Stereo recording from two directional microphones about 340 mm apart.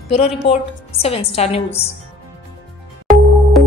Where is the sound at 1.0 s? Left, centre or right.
Centre.